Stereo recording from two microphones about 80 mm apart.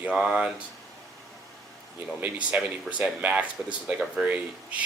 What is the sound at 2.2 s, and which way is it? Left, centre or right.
Speech, centre.